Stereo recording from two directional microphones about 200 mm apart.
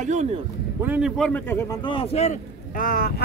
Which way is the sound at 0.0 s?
35° right (ahead or behind).